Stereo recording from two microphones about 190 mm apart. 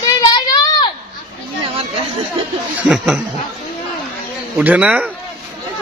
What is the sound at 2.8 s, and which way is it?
Snicker, 5° right (ahead or behind).